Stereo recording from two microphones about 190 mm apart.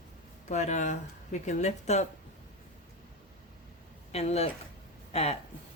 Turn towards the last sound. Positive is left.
turn(degrees=35)  # may be behind; listen again after turning